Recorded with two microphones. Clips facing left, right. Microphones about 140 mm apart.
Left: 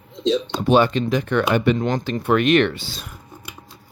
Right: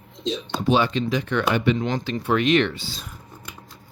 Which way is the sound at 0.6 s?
50° left (ahead or behind).